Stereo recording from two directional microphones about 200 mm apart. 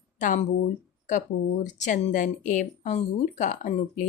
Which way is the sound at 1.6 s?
35° left (ahead or behind).